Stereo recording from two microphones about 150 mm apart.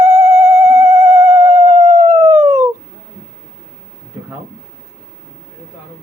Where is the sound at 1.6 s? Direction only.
50° right (ahead or behind).